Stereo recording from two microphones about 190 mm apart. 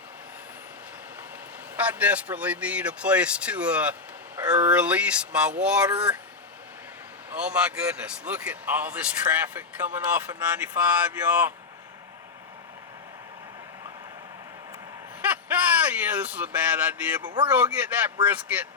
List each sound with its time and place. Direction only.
1.7 s speech: 5° right (ahead or behind)
7.3 s speech: 5° right (ahead or behind)
15.2 s a sound: 10° right (ahead or behind)
17.2 s speech: 25° right (ahead or behind)
17.5 s speech: 10° right (ahead or behind)